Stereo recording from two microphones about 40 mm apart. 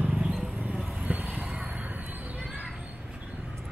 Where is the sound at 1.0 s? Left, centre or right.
Right.